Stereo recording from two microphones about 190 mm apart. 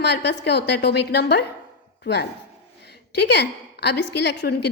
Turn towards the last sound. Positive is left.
turn(degrees=60)  # may be behind; listen again after turning